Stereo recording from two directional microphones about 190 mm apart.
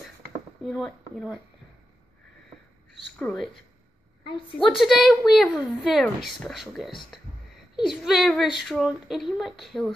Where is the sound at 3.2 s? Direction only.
5° left (ahead or behind).